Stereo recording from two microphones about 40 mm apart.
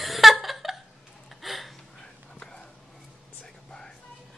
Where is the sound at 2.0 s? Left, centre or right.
Centre.